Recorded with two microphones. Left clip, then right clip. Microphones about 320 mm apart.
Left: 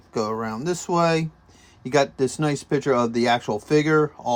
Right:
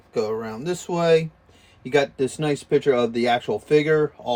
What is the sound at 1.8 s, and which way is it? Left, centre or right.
Speech, centre.